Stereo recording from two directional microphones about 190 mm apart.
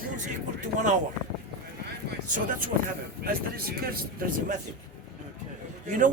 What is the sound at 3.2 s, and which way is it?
Speech, 55° right (ahead or behind).